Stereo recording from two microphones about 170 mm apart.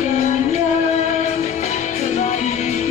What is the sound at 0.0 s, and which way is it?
Music, 40° left (ahead or behind).